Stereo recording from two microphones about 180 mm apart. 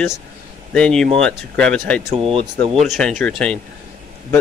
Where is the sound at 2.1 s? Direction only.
30° right (ahead or behind).